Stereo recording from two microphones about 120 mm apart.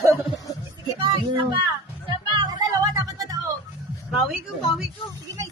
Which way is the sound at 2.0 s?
40° right (ahead or behind).